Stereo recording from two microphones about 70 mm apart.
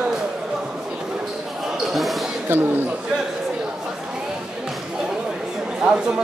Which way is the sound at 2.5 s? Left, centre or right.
Right.